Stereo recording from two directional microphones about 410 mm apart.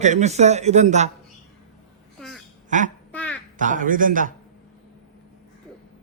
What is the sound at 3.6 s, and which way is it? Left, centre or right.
Speech, centre.